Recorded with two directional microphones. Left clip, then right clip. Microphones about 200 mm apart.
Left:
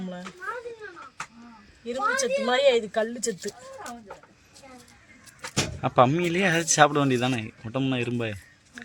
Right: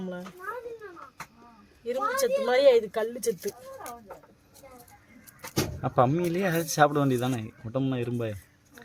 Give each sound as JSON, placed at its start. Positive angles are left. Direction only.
{"t": 0.0, "sound": "a sound", "side_deg": -25}
{"t": 1.9, "sound": "speech", "side_deg": -30}
{"t": 5.8, "sound": "speech", "side_deg": 0}